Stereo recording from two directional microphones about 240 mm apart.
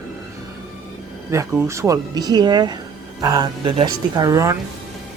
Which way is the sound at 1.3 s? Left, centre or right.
Centre.